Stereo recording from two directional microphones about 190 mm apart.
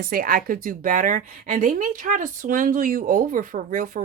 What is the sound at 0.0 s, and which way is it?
Speech, 50° right (ahead or behind).